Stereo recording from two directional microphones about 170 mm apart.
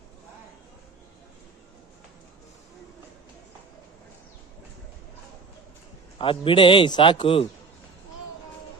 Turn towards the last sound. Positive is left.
turn(degrees=30)  # may be behind; listen again after turning